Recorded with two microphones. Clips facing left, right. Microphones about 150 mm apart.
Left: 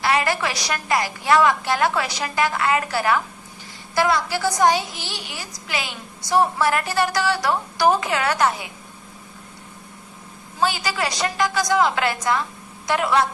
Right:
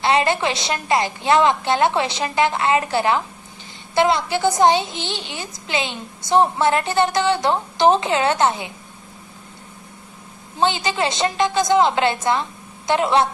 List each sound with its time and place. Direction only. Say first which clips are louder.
0.0 s a woman's voice: right 3 dB; 25° right (ahead or behind)
10.6 s a woman's voice: right 3 dB; 25° right (ahead or behind)